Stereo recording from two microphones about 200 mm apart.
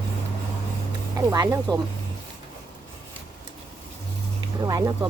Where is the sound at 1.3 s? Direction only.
20° right (ahead or behind).